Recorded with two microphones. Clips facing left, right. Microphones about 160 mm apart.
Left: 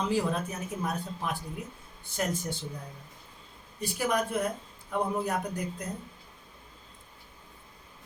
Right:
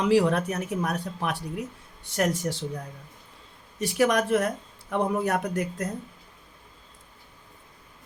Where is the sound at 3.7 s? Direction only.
80° right.